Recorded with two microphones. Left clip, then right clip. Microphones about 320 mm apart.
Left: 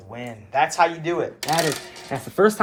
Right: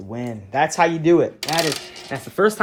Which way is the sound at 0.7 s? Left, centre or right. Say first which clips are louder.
Right 4 dB; right.